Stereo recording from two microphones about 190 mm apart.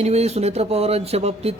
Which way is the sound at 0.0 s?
35° right (ahead or behind).